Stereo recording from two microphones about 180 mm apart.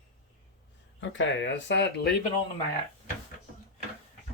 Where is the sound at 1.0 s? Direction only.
90° left; by 2.1 s 70° left (ahead or behind).